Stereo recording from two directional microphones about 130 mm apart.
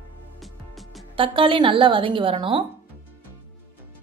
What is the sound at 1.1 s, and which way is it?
A woman's voice, 40° right (ahead or behind).